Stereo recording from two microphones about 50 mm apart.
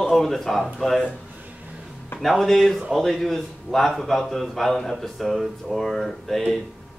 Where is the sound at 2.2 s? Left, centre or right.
Centre.